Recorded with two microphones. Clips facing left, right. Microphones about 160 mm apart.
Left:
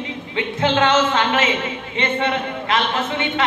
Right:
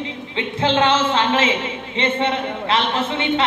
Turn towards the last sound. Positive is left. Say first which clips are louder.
# even
turn(degrees=-30)  # may be behind; listen again after turning